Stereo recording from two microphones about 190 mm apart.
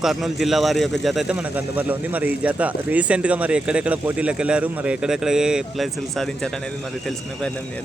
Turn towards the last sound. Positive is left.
turn(degrees=0)  # may be behind; listen again after turning